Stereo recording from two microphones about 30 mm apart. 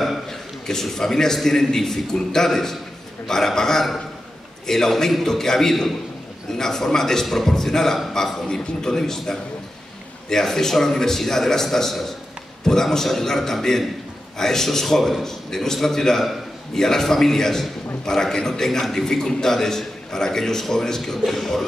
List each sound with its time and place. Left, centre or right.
0.3 s a man's voice: centre
8.5 s a man's voice: left
21.0 s a man's voice: centre